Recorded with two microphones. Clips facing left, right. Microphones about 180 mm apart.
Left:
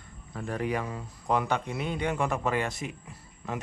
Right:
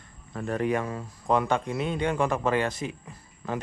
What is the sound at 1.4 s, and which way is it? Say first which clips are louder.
Speech: right 3 dB; 30° right (ahead or behind).